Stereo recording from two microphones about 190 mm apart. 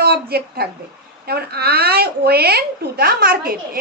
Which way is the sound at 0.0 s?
55° right (ahead or behind).